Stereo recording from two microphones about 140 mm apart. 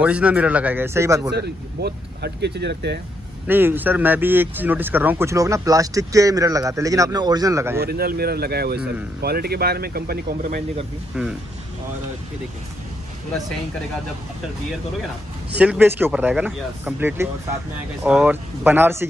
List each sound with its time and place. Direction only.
0.0 s speech: 10° right (ahead or behind)
3.4 s speech: 15° right (ahead or behind)
7.8 s speech: 90° right
11.1 s speech: 5° right (ahead or behind)
15.5 s speech: 10° right (ahead or behind)
17.2 s speech: 20° right (ahead or behind)